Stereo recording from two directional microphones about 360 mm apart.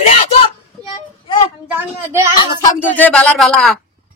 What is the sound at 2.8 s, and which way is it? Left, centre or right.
Speech, centre.